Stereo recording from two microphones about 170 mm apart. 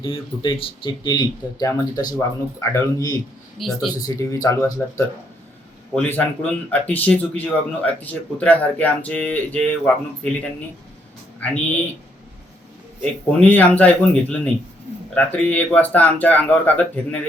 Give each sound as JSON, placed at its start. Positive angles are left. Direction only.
{"t": 0.0, "sound": "speech", "side_deg": 30}
{"t": 3.6, "sound": "speech", "side_deg": 0}
{"t": 4.0, "sound": "speech", "side_deg": 20}
{"t": 11.3, "sound": "speech", "side_deg": 10}
{"t": 13.0, "sound": "speech", "side_deg": 10}